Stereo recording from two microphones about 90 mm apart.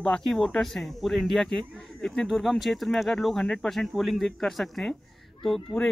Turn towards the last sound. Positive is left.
turn(degrees=0)  # may be behind; listen again after turning